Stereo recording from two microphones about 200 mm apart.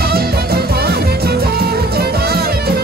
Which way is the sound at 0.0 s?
50° right (ahead or behind).